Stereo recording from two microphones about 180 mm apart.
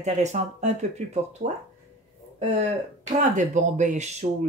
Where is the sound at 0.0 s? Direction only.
40° right (ahead or behind).